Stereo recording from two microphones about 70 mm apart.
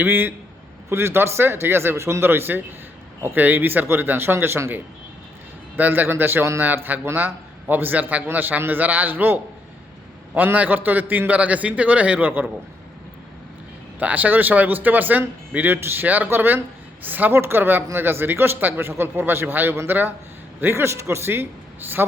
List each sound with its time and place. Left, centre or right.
0.0 s a man's voice: right
14.0 s a man's voice: right